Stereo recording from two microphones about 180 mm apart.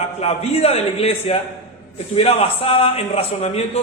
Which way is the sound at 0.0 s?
35° left (ahead or behind).